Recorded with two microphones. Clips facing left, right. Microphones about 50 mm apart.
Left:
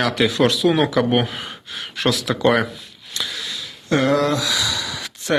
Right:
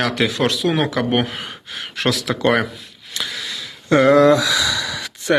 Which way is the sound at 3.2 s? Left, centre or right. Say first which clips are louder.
Right 2 dB; right.